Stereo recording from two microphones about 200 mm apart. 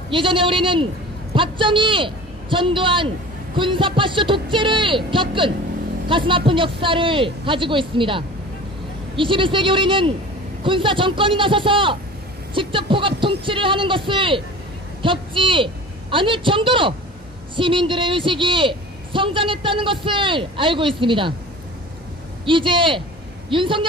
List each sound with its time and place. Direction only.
0.1 s a man's voice: 25° right (ahead or behind)
22.4 s speech: 25° right (ahead or behind)